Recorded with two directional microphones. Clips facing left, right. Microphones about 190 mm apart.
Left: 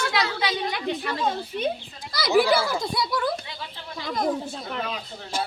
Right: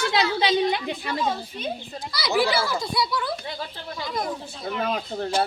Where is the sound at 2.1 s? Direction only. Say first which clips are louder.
Left 3 dB; 50° left (ahead or behind).